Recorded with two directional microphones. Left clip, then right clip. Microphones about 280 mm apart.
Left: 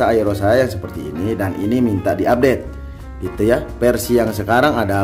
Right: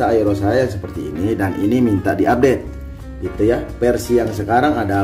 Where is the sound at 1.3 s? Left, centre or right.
Centre.